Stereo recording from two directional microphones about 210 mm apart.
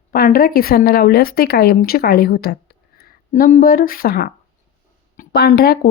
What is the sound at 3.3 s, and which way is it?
A woman's voice, 40° left (ahead or behind).